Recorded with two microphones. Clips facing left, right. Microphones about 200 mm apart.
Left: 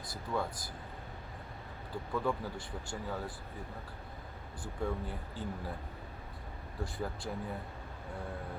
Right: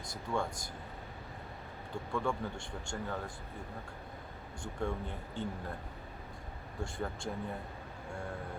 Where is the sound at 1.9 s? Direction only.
5° left (ahead or behind).